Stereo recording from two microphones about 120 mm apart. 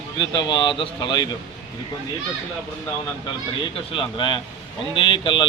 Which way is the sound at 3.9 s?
45° left (ahead or behind).